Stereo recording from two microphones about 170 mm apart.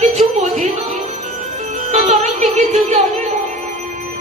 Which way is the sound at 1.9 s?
40° right (ahead or behind).